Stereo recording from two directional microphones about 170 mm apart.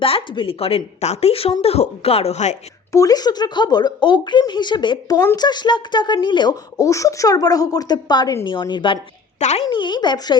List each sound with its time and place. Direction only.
0.0 s speech: 30° left (ahead or behind)
2.9 s a woman's voice: 20° left (ahead or behind)
9.4 s a woman's voice: 45° left (ahead or behind)
9.6 s a woman's voice: 25° left (ahead or behind)